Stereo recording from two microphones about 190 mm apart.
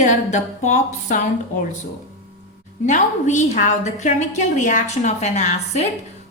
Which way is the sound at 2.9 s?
40° left (ahead or behind).